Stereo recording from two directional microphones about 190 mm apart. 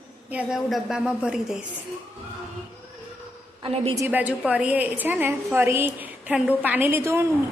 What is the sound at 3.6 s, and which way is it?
Speech, 25° right (ahead or behind).